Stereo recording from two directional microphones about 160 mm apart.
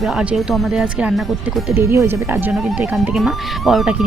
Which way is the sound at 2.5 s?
Centre (ahead or behind).